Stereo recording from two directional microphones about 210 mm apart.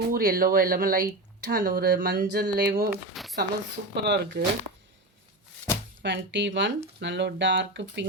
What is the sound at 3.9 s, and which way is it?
Speech, 50° right (ahead or behind).